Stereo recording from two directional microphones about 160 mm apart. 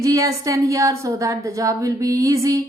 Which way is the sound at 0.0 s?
20° right (ahead or behind).